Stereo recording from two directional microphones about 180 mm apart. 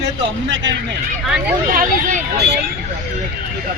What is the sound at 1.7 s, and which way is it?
Speech, 50° right (ahead or behind).